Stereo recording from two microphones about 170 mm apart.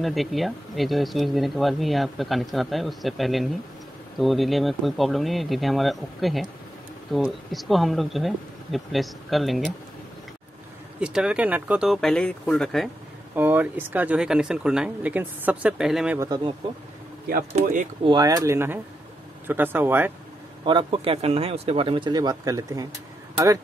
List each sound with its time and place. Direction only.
0.0 s speech: centre (ahead or behind)
11.0 s speech: 5° right (ahead or behind)
13.3 s speech: 10° right (ahead or behind)
16.2 s speech: 25° right (ahead or behind)
18.0 s speech: 20° right (ahead or behind)
20.6 s speech: 30° right (ahead or behind)